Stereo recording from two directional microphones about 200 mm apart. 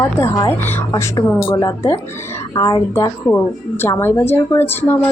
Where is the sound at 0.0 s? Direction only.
15° left (ahead or behind).